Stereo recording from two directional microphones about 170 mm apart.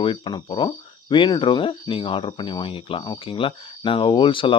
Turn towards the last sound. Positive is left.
turn(degrees=30)  # may be behind; listen again after turning